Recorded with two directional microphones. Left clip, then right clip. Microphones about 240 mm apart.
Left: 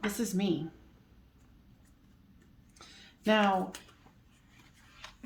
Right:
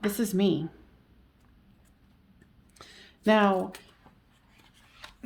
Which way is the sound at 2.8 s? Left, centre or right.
Right.